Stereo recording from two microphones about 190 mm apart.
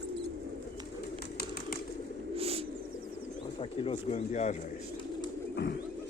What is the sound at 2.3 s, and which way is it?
Bird, 30° right (ahead or behind).